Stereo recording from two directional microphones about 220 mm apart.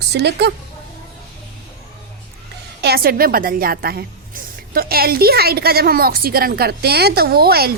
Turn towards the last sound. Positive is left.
turn(degrees=-45)  # may be behind; listen again after turning